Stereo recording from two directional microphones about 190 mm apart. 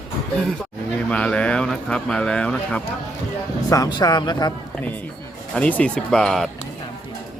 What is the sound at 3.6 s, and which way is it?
Speech, 20° left (ahead or behind).